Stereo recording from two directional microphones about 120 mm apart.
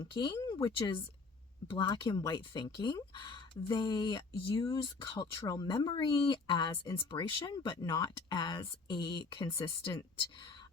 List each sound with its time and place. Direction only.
0.0 s speech: 40° left (ahead or behind)
9.9 s speech: 30° left (ahead or behind)